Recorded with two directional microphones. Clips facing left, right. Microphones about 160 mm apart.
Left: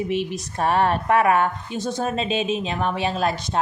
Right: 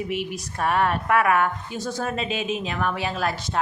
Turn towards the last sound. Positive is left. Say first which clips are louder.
# left 3 dB
turn(degrees=25)  # may be behind; listen again after turning